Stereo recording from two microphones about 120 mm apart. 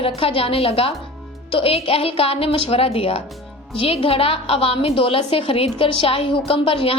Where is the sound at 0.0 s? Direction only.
50° left (ahead or behind).